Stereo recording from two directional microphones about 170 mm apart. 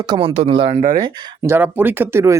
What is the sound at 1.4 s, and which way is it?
Speech, 10° right (ahead or behind).